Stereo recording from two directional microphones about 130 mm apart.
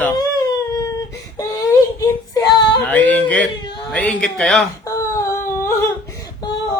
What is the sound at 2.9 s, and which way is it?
Yodeling, 10° left (ahead or behind).